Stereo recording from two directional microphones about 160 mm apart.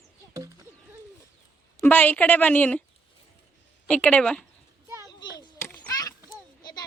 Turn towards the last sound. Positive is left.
turn(degrees=25)  # may be behind; listen again after turning